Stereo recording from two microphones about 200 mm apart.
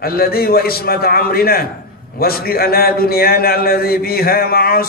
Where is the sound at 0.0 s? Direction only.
50° left (ahead or behind).